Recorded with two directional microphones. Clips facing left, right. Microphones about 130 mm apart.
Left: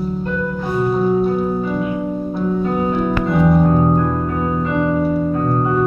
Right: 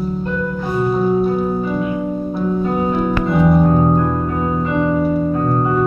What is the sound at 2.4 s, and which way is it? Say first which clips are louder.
Music: even; 15° right (ahead or behind).